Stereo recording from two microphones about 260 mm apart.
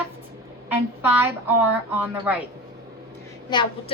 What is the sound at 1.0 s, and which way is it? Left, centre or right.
A woman's voice, centre.